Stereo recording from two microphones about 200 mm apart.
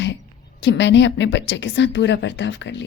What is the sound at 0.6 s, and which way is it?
A woman's voice, 65° left (ahead or behind).